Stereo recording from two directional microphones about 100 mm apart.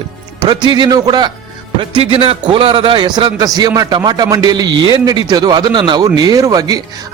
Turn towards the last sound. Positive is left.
turn(degrees=-40)  # may be behind; listen again after turning